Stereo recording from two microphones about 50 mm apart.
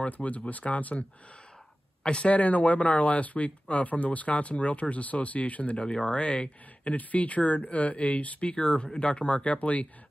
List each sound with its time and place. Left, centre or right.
0.0 s speech: left
2.0 s speech: left
6.9 s speech: left